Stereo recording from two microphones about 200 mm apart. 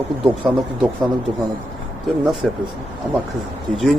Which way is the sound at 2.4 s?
Centre (ahead or behind).